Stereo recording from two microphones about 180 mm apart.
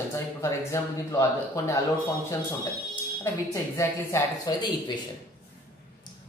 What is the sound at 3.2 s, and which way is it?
Speech, 15° left (ahead or behind).